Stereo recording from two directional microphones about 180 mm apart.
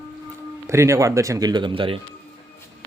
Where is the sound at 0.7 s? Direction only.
15° right (ahead or behind).